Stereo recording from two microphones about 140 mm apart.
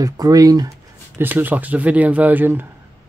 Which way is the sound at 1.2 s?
15° right (ahead or behind).